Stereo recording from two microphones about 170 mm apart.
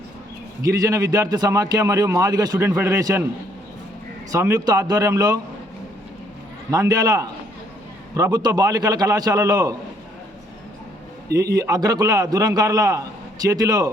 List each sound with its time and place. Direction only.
0.6 s a man's voice: 20° right (ahead or behind)
4.3 s a man's voice: 20° right (ahead or behind)
6.7 s a man's voice: 20° right (ahead or behind)
11.5 s a man's voice: 20° right (ahead or behind)